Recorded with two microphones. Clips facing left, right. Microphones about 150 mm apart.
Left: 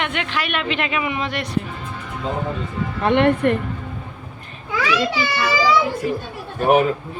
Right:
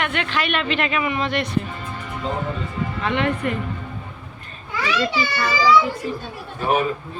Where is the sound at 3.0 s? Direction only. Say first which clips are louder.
Left 7 dB; 60° left (ahead or behind).